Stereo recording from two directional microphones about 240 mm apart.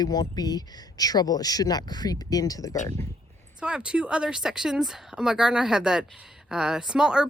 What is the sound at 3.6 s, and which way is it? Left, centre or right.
A woman's voice, centre.